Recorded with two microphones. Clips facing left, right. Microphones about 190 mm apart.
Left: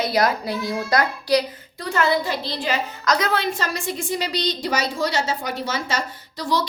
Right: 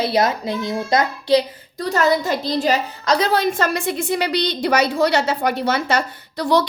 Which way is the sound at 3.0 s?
30° right (ahead or behind).